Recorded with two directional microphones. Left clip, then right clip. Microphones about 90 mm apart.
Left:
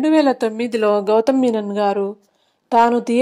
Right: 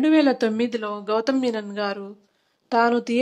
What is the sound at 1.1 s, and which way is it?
Speech, 45° left (ahead or behind).